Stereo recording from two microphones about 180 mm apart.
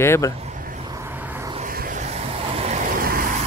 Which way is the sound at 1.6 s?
50° right (ahead or behind).